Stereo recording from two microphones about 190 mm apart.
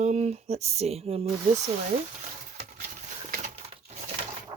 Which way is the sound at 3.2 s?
45° right (ahead or behind).